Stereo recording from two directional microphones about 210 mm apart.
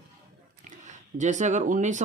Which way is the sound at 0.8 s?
35° right (ahead or behind).